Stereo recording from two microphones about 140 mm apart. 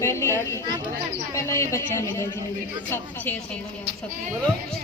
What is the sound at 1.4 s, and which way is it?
Speech, 20° left (ahead or behind).